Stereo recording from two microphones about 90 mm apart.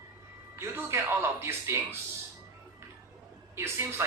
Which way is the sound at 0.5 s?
25° right (ahead or behind).